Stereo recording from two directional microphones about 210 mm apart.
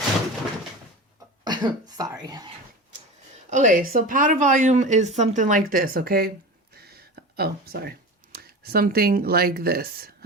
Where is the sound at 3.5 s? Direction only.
40° right (ahead or behind).